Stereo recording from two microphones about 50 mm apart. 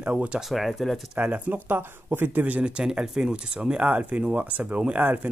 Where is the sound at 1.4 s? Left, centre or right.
Right.